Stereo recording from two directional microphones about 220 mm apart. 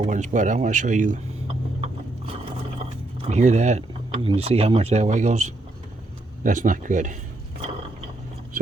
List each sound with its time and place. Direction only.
0.0 s speech: 35° right (ahead or behind)